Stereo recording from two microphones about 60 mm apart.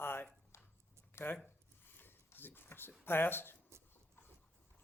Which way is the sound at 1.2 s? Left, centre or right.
Left.